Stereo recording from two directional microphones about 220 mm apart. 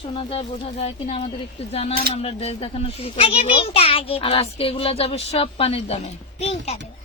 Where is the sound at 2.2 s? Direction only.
25° left (ahead or behind).